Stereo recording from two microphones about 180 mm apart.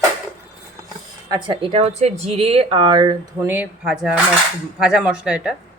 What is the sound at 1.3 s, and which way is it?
Speech, 30° right (ahead or behind).